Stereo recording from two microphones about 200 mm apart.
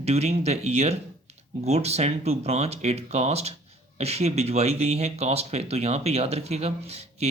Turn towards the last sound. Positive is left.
turn(degrees=-30)  # may be behind; listen again after turning